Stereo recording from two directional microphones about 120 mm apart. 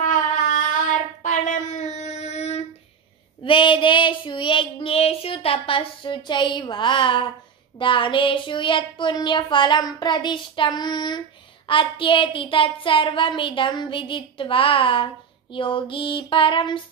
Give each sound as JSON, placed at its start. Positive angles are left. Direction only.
{"t": 0.0, "sound": "child singing", "side_deg": 90}
{"t": 3.4, "sound": "child singing", "side_deg": 45}
{"t": 7.8, "sound": "a sound", "side_deg": 45}